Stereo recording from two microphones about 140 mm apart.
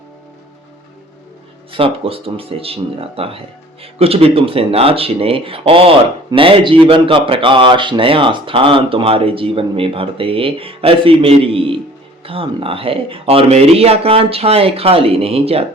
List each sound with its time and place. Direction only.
1.7 s a man's voice: 40° right (ahead or behind)